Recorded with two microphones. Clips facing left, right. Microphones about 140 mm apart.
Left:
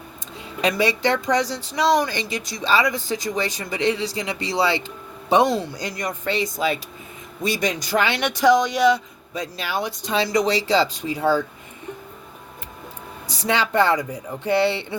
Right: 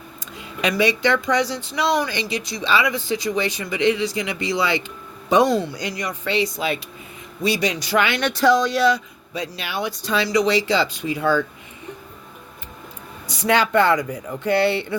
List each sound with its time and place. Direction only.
0.8 s speech: 35° left (ahead or behind)
5.7 s speech: 45° left (ahead or behind)
8.2 s speech: 15° left (ahead or behind)
9.3 s speech: 45° left (ahead or behind)
10.0 s speech: 25° left (ahead or behind)
10.2 s speech: 45° left (ahead or behind)
13.2 s speech: 35° left (ahead or behind)